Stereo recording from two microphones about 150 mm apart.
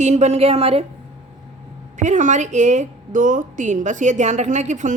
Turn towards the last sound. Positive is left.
turn(degrees=-55)  # may be behind; listen again after turning